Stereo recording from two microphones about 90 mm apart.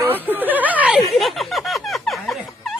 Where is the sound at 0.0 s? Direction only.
20° right (ahead or behind).